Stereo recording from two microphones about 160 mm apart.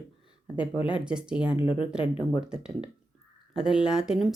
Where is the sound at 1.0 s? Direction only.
5° right (ahead or behind).